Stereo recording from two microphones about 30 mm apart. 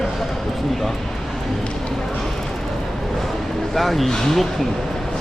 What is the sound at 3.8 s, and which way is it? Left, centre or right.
Speech, centre.